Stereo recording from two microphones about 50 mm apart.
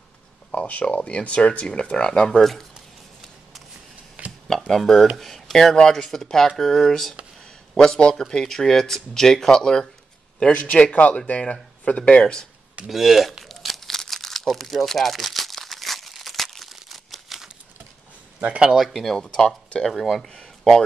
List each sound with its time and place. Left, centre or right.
0.5 s speech: left
2.7 s a sound: centre
4.2 s a sound: right
4.6 s speech: centre
10.5 s speech: left
12.8 s crumpling: centre
18.4 s speech: right
18.8 s speech: centre
19.9 s speech: centre